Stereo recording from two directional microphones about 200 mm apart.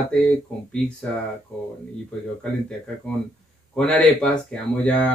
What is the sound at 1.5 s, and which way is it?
Speech, 5° left (ahead or behind).